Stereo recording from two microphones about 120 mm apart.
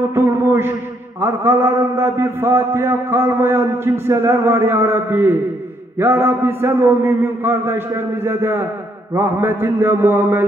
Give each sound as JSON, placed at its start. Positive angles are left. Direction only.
{"t": 0.1, "sound": "a man's voice", "side_deg": -20}